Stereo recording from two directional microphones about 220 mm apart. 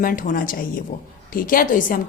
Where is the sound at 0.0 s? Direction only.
40° left (ahead or behind).